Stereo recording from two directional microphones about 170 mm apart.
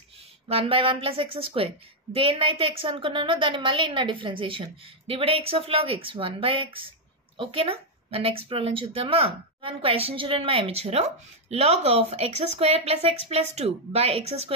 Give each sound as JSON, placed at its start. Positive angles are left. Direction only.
{"t": 0.5, "sound": "a woman's voice", "side_deg": -35}